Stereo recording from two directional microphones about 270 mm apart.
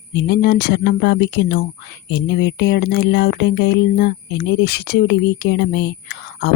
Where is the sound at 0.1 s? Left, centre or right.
Left.